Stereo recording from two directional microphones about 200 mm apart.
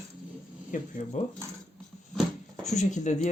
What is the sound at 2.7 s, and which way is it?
Speech, 35° left (ahead or behind).